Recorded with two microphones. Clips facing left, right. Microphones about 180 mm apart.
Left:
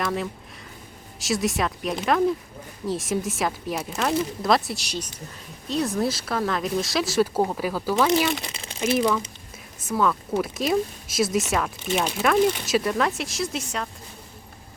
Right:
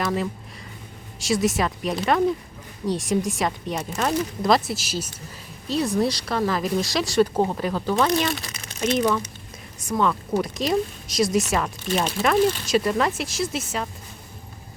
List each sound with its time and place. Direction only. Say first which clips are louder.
0.0 s speech: right 2 dB; centre (ahead or behind)
8.1 s speech: left 1 dB; 15° left (ahead or behind)
8.4 s a sound: left 1 dB; 25° left (ahead or behind)
8.8 s speech: even; 5° left (ahead or behind)